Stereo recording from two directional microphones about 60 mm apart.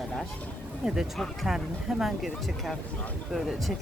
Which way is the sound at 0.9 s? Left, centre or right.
Centre.